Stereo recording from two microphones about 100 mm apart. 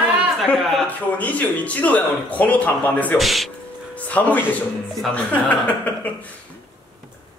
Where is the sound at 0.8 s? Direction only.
15° left (ahead or behind).